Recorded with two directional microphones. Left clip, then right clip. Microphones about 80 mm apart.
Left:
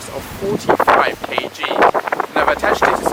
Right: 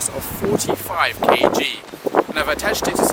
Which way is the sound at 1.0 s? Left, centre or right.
Right.